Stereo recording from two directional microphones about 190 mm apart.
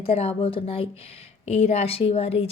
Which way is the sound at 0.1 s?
30° left (ahead or behind).